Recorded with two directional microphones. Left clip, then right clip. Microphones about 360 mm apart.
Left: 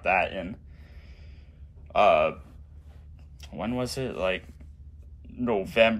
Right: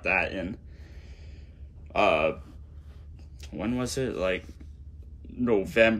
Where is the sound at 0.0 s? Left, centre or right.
Centre.